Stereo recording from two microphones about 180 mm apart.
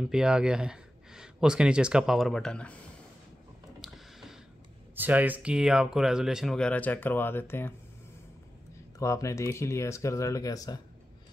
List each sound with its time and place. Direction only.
0.0 s speech: 5° right (ahead or behind)
3.8 s a sound: centre (ahead or behind)
4.9 s speech: 10° right (ahead or behind); by 7.7 s 10° left (ahead or behind)
8.9 s speech: 15° left (ahead or behind)